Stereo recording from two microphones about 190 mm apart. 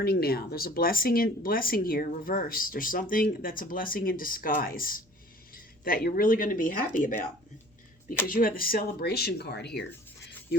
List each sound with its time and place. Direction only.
0.0 s speech: 55° left (ahead or behind)
8.3 s speech: 50° left (ahead or behind)